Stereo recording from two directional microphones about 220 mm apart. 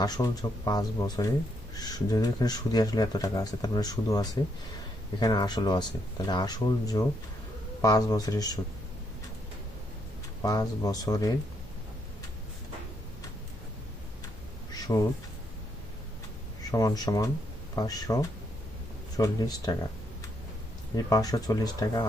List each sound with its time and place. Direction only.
0.0 s speech: 15° left (ahead or behind)
10.4 s speech: 15° left (ahead or behind)
14.9 s speech: 15° left (ahead or behind)
16.7 s speech: 15° left (ahead or behind)
20.9 s speech: 15° left (ahead or behind)